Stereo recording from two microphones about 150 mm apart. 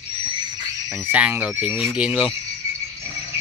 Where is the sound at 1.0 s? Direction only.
10° right (ahead or behind).